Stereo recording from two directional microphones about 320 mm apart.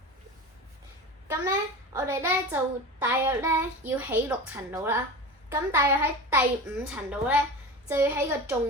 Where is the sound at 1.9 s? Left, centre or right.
Centre.